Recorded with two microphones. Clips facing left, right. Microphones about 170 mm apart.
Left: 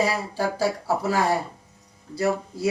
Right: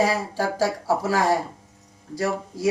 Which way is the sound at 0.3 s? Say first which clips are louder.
Right 1 dB; 90° right.